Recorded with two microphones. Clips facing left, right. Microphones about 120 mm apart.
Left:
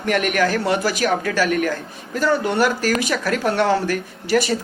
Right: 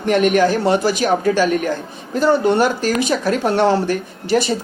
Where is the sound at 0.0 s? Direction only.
25° right (ahead or behind).